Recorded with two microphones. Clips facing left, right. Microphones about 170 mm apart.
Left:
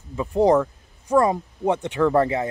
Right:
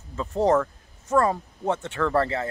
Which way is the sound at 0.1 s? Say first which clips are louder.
Left 4 dB; 15° left (ahead or behind).